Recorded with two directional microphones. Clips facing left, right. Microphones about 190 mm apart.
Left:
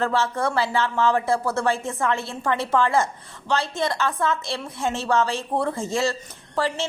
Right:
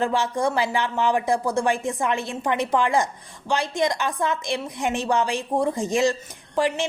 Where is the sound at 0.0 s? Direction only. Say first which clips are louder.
Right 1 dB; 15° right (ahead or behind).